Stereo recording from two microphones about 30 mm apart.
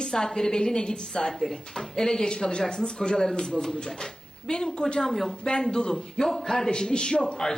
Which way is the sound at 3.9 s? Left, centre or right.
Left.